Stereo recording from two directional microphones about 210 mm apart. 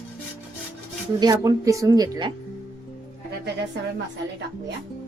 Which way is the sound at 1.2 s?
15° right (ahead or behind).